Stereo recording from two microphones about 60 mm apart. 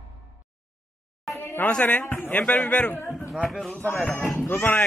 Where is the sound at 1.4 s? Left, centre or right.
Left.